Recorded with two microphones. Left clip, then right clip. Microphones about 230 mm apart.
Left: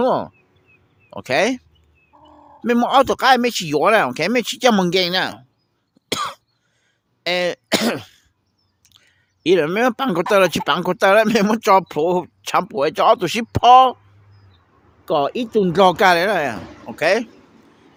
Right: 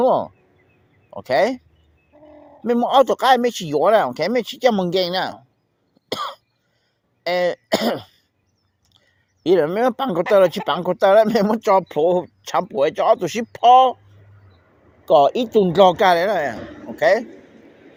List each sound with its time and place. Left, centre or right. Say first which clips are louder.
0.0 s speech: right 1 dB; left
6.1 s cough: left 3 dB; left
7.3 s speech: even; left
15.0 s speech: right 5 dB; left